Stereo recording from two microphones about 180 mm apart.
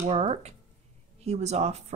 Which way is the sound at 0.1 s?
35° right (ahead or behind).